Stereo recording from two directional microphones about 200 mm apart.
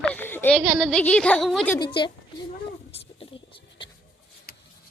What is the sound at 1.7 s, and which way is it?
Speech, 20° left (ahead or behind).